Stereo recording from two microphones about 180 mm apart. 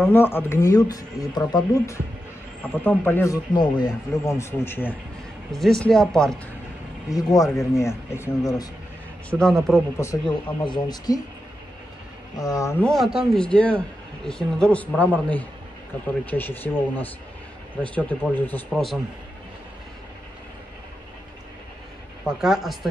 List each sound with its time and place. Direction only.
0.0 s speech: 10° left (ahead or behind)
3.5 s speech: 20° left (ahead or behind); by 6.3 s 5° left (ahead or behind)
7.1 s speech: 20° left (ahead or behind)
9.3 s speech: 5° left (ahead or behind)
10.2 s speech: 25° left (ahead or behind)
12.4 s speech: 20° left (ahead or behind)
12.8 s speech: centre (ahead or behind)
22.2 s speech: centre (ahead or behind)